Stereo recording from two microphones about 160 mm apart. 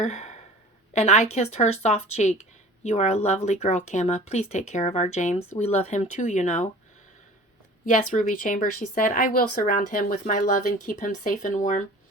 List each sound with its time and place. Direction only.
0.0 s a woman's voice: 45° left (ahead or behind)
7.9 s a woman's voice: 55° left (ahead or behind)